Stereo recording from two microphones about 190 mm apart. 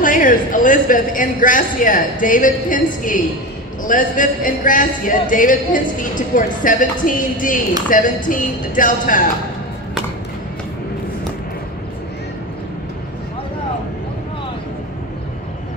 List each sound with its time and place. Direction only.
0.0 s speech: 45° left (ahead or behind)